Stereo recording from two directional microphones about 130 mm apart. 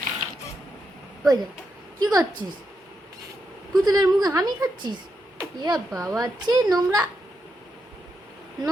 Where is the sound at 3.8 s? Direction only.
30° right (ahead or behind).